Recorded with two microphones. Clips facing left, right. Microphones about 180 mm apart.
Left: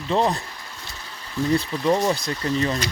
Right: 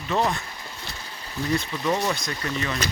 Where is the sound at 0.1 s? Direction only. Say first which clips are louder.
Left 3 dB; 30° left (ahead or behind).